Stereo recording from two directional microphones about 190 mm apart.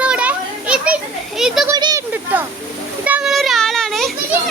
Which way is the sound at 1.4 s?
Centre (ahead or behind).